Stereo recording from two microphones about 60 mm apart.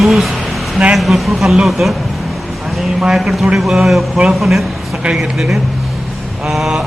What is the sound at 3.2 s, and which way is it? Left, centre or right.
Speech, centre.